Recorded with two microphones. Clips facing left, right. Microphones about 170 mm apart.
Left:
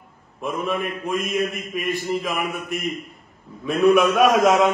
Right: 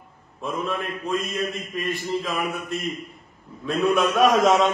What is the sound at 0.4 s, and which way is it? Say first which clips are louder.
Mantra: left 3 dB; 15° left (ahead or behind).